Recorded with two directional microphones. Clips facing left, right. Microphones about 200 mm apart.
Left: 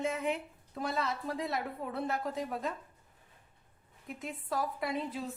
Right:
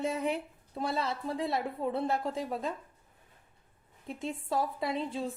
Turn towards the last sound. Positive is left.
turn(degrees=-30)  # may be behind; listen again after turning